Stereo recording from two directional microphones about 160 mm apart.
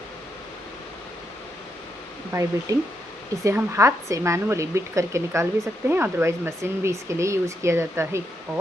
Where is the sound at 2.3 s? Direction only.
20° right (ahead or behind).